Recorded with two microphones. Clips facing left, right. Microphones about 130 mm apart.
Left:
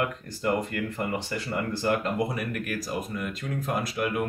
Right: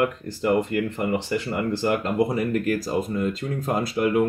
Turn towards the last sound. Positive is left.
turn(degrees=-25)  # may be behind; listen again after turning